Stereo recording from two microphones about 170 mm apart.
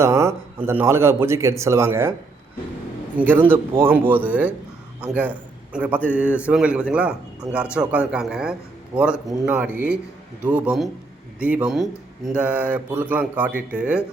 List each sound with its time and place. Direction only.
0.0 s a man's voice: 15° right (ahead or behind)
3.2 s a man's voice: 10° right (ahead or behind)